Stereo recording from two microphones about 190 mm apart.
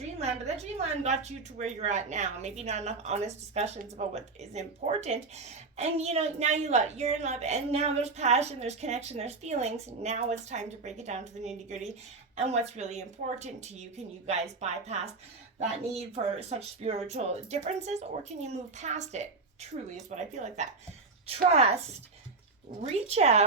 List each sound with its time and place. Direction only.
0.0 s a woman's voice: 35° right (ahead or behind)
22.8 s a woman's voice: 35° right (ahead or behind)